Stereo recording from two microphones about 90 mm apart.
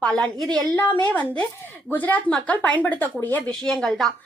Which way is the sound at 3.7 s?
5° left (ahead or behind).